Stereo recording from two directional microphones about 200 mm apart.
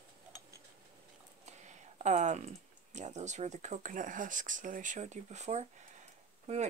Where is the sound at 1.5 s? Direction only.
35° right (ahead or behind).